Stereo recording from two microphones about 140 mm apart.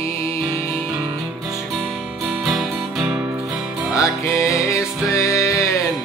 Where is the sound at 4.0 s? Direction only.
20° left (ahead or behind).